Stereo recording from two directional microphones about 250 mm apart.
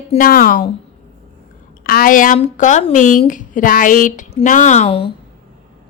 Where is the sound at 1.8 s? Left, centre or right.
Left.